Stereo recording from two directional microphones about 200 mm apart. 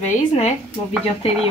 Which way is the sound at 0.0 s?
35° left (ahead or behind).